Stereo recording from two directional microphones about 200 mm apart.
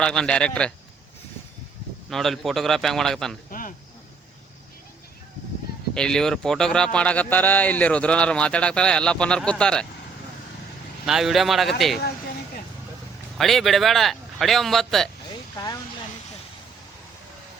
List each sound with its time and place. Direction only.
0.0 s a man's voice: 5° left (ahead or behind)
2.0 s a man's voice: centre (ahead or behind)
3.5 s cricket: 45° left (ahead or behind)
5.9 s a man's voice: 5° left (ahead or behind)
11.0 s a man's voice: centre (ahead or behind)
13.4 s a man's voice: centre (ahead or behind)
15.5 s speech: 20° left (ahead or behind)